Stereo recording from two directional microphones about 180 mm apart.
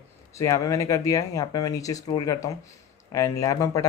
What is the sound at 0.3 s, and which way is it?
Speech, 15° left (ahead or behind).